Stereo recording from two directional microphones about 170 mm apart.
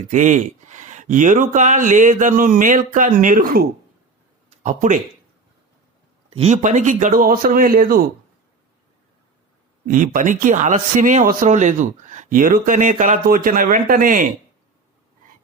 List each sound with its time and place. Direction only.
0.1 s speech: 45° right (ahead or behind)
4.4 s a sound: 45° right (ahead or behind)
6.3 s speech: 40° right (ahead or behind); by 8.0 s 60° right (ahead or behind)
9.8 s speech: 50° right (ahead or behind)